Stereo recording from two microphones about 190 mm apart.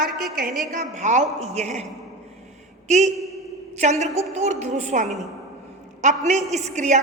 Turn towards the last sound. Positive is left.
turn(degrees=-40)  # may be behind; listen again after turning